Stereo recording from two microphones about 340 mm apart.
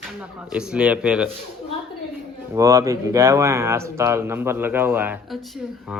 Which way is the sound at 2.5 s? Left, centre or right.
Centre.